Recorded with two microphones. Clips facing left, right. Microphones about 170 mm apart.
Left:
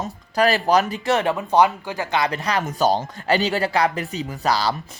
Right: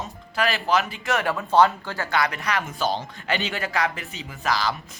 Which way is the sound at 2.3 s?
35° left (ahead or behind).